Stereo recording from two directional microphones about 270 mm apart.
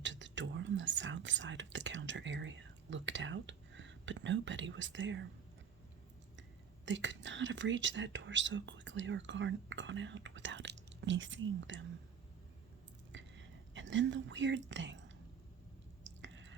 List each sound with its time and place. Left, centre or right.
0.0 s whispering: right
6.8 s speech: right
13.1 s whispering: right
16.0 s drip: right